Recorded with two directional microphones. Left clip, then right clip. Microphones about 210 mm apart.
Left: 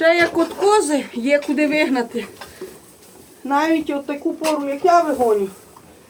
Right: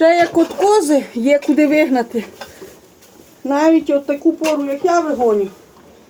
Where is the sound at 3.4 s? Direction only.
35° right (ahead or behind).